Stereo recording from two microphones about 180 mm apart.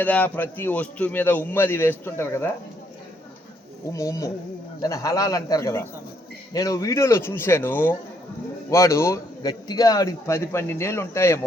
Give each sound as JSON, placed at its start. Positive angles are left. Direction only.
{"t": 0.0, "sound": "a man's voice", "side_deg": 10}
{"t": 3.9, "sound": "a man's voice", "side_deg": 15}